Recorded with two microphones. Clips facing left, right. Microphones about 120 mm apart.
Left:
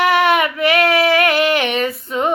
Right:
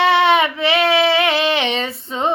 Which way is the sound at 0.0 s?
25° right (ahead or behind).